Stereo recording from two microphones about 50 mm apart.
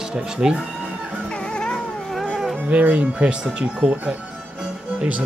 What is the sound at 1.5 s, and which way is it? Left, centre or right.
Cat, centre.